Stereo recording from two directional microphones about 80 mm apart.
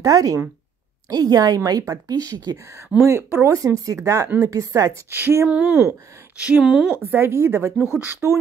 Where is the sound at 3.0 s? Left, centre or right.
Right.